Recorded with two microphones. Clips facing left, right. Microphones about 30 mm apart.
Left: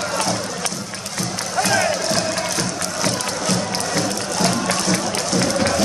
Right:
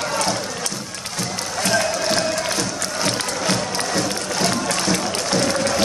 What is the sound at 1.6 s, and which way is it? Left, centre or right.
Music, centre.